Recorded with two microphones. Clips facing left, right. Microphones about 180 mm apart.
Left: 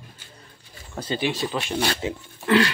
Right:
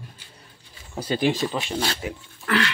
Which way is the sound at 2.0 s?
20° left (ahead or behind).